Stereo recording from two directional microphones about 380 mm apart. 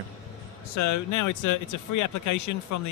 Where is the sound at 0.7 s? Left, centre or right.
Left.